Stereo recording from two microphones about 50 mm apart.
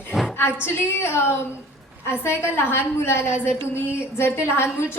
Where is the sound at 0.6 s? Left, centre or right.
Left.